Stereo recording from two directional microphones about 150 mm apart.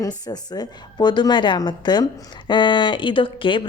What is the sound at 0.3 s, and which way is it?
A woman's voice, 25° left (ahead or behind).